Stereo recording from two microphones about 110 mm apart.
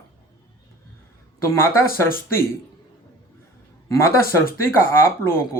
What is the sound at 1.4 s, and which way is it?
Speech, 25° left (ahead or behind).